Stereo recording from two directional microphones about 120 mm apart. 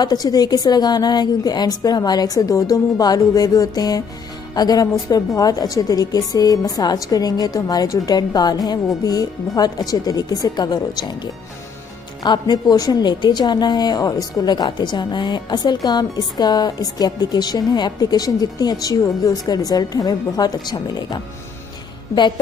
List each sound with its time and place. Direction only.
0.0 s a woman's voice: 35° left (ahead or behind)
12.2 s a woman's voice: 35° left (ahead or behind)